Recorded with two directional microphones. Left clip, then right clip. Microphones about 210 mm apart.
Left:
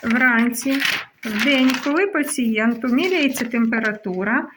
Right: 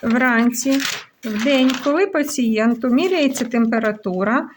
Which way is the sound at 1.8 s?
35° right (ahead or behind).